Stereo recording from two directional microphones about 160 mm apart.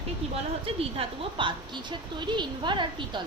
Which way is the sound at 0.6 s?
35° right (ahead or behind).